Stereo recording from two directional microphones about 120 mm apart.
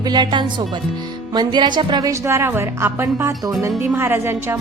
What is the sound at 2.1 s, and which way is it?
Speech, 25° right (ahead or behind).